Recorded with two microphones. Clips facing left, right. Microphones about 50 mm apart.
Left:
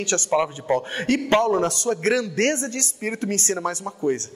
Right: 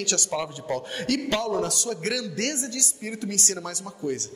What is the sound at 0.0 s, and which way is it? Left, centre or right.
A man's voice, left.